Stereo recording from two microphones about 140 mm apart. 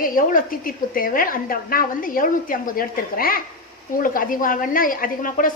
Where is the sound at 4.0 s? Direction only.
80° left.